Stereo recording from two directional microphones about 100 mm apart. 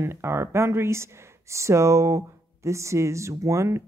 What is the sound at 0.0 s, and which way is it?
Speech, 25° right (ahead or behind).